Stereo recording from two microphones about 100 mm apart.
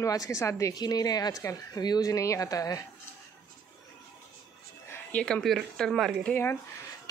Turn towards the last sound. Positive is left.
turn(degrees=25)  # may be behind; listen again after turning